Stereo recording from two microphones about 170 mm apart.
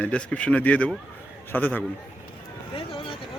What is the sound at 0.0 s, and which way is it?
Speech, 5° left (ahead or behind).